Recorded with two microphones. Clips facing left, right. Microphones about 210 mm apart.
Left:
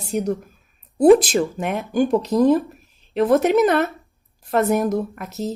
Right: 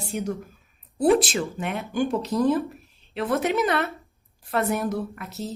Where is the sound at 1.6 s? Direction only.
40° left (ahead or behind).